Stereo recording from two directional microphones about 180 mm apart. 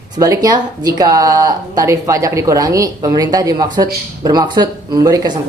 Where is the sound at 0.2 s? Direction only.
20° right (ahead or behind).